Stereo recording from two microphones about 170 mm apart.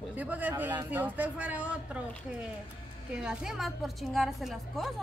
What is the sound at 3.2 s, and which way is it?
A woman's voice, 5° right (ahead or behind).